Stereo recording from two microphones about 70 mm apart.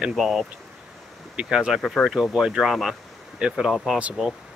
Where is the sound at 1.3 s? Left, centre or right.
Centre.